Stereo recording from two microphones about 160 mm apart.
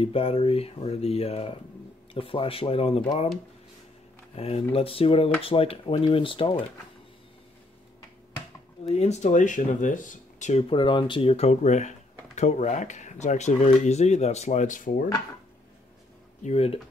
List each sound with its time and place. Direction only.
0.0 s speech: 35° left (ahead or behind)
4.4 s speech: 40° left (ahead or behind)
8.8 s speech: 40° left (ahead or behind)
10.7 s speech: 30° left (ahead or behind); by 15.0 s 60° left (ahead or behind)
16.4 s speech: 40° left (ahead or behind)